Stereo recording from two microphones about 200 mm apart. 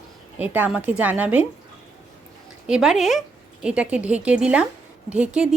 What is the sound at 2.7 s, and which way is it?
A woman's voice, 5° right (ahead or behind).